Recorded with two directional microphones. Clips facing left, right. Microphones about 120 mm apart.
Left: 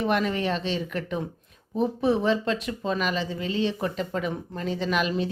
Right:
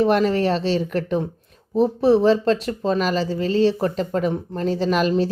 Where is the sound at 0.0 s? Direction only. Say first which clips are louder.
Right 7 dB; 35° right (ahead or behind).